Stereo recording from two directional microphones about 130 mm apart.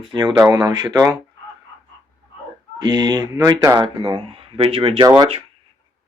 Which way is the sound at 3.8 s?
40° right (ahead or behind).